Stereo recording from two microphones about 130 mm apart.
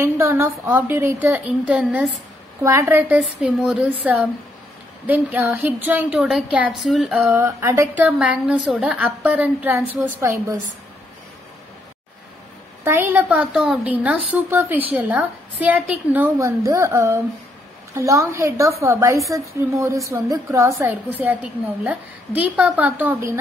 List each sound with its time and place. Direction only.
0.0 s a woman's voice: 15° right (ahead or behind)
2.6 s a woman's voice: 20° right (ahead or behind)
3.2 s a woman's voice: 5° right (ahead or behind)
6.1 s speech: 5° right (ahead or behind)
7.3 s a woman's voice: 20° right (ahead or behind)
12.8 s a woman's voice: 15° right (ahead or behind)
16.3 s a woman's voice: 25° right (ahead or behind)
21.2 s a woman's voice: 10° right (ahead or behind)